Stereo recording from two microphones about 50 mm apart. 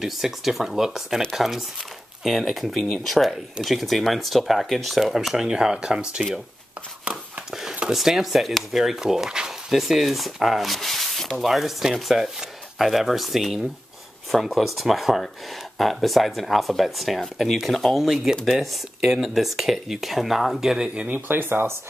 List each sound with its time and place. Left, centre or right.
0.0 s speech: centre
7.1 s a sound: right
7.9 s speech: centre
19.0 s speech: centre
20.9 s speech: right
21.3 s speech: right